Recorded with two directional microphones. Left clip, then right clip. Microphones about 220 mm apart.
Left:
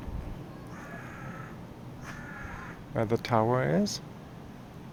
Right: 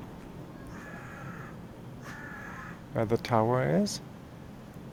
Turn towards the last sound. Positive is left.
turn(degrees=-5)  # may be behind; listen again after turning